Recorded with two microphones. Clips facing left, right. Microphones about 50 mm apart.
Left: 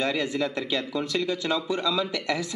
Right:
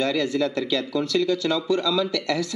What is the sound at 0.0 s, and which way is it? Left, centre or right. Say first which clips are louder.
Speech: right 3 dB; centre.